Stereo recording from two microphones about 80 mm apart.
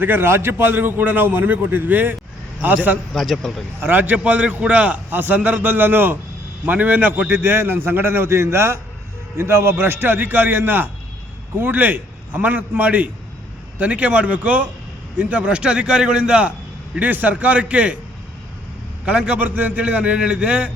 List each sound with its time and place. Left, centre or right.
0.0 s a man's voice: right
3.1 s speech: centre
3.8 s a man's voice: right
19.0 s a man's voice: centre